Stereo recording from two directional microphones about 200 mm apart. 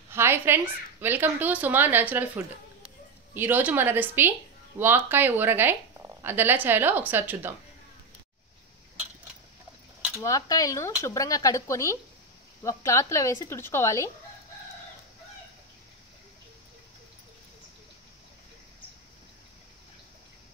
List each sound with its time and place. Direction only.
0.1 s a woman's voice: 10° right (ahead or behind)
10.2 s speech: 15° left (ahead or behind)